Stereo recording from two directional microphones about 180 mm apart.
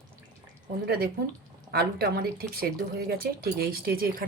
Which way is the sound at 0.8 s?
60° right (ahead or behind).